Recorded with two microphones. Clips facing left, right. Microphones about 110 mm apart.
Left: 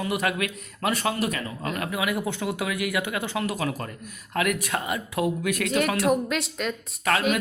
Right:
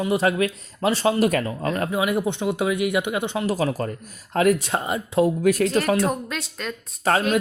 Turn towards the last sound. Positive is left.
turn(degrees=-30)  # may be behind; listen again after turning